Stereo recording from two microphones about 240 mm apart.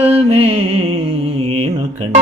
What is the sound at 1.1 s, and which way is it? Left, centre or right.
Mantra, right.